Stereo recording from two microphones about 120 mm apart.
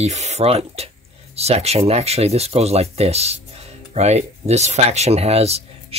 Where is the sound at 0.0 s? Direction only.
70° right (ahead or behind).